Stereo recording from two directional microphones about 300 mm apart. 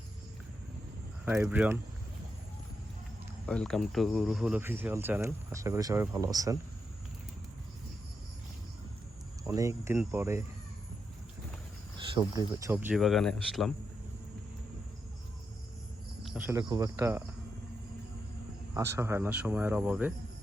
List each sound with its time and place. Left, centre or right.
1.2 s speech: centre
3.4 s speech: centre
9.4 s speech: centre
11.9 s speech: centre
16.2 s speech: centre
18.7 s speech: centre